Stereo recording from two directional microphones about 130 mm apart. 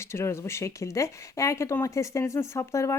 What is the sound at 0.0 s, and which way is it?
Speech, 20° left (ahead or behind).